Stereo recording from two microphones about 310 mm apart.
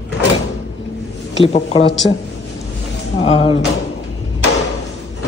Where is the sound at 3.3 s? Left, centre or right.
Centre.